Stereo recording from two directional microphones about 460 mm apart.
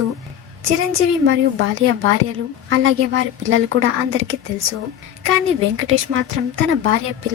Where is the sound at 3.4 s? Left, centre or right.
Right.